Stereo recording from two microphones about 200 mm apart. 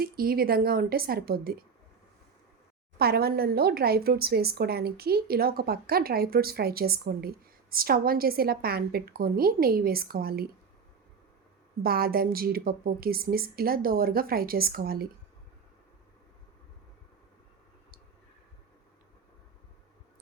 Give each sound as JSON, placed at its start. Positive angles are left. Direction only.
{"t": 0.0, "sound": "speech", "side_deg": -45}
{"t": 3.0, "sound": "speech", "side_deg": -50}
{"t": 11.8, "sound": "speech", "side_deg": -50}